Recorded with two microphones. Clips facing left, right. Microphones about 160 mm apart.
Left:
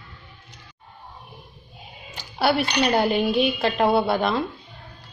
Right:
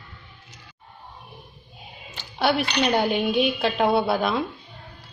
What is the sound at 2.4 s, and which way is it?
A woman's voice, 5° left (ahead or behind).